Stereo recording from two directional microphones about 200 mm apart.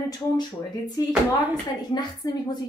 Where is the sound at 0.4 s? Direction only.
20° left (ahead or behind).